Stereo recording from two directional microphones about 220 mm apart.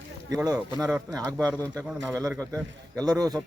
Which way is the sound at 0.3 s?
15° right (ahead or behind).